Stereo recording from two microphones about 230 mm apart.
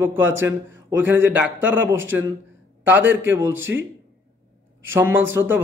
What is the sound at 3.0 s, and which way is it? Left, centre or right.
Speech, right.